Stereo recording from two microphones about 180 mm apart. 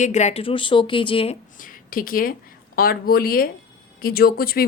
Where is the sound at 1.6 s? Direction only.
50° left (ahead or behind).